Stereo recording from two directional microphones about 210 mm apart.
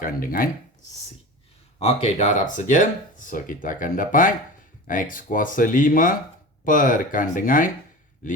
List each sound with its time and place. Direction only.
0.0 s speech: 45° left (ahead or behind)
1.8 s speech: 30° left (ahead or behind)